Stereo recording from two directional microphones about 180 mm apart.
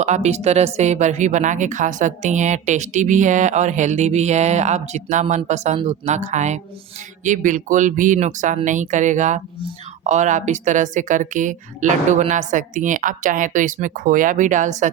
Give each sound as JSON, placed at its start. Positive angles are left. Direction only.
{"t": 0.0, "sound": "a woman's voice", "side_deg": -40}